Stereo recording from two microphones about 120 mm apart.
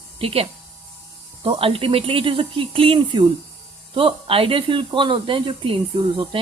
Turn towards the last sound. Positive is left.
turn(degrees=-45)  # may be behind; listen again after turning